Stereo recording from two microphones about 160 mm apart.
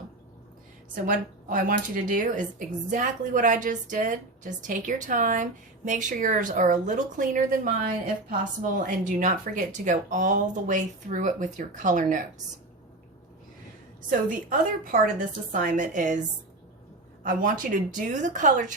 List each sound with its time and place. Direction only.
1.0 s speech: 60° right (ahead or behind)
14.1 s a woman's voice: 55° right (ahead or behind)
17.2 s speech: 60° right (ahead or behind)